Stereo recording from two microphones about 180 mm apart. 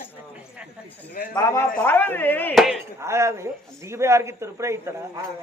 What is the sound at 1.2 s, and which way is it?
Speech, 55° left (ahead or behind).